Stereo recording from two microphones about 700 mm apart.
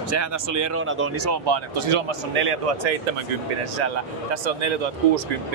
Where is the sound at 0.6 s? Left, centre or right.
Centre.